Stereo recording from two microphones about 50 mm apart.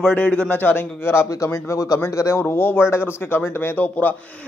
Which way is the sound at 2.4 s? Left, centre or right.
Left.